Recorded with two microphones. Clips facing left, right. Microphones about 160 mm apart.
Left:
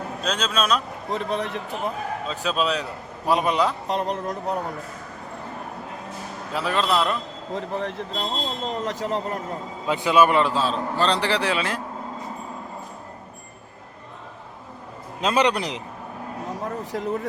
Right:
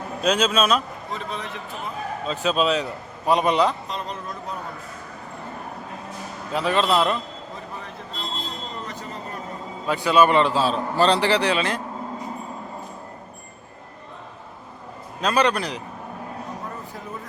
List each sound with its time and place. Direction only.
0.2 s a man's voice: 10° right (ahead or behind)
1.1 s speech: 60° left (ahead or behind)
2.2 s a man's voice: centre (ahead or behind)
3.8 s speech: 65° left (ahead or behind)
6.5 s a man's voice: centre (ahead or behind)
7.5 s speech: 85° left
9.8 s a man's voice: 15° left (ahead or behind)
15.2 s a man's voice: 20° left (ahead or behind)
16.6 s a sound: 85° left